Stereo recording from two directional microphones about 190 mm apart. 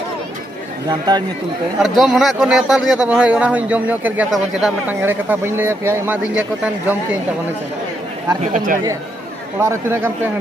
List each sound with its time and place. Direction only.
0.8 s speech: 20° right (ahead or behind)
1.8 s speech: centre (ahead or behind)
8.4 s speech: 45° right (ahead or behind)
9.6 s speech: 15° right (ahead or behind)